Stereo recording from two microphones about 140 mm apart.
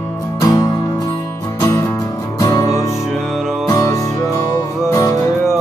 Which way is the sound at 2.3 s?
25° left (ahead or behind).